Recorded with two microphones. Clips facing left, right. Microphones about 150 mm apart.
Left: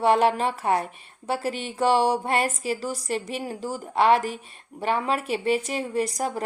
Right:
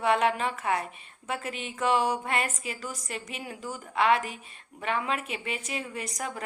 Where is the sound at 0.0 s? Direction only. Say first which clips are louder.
Left 5 dB; 35° left (ahead or behind).